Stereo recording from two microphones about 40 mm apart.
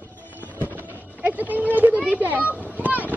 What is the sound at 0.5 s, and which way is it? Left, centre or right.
Music, left.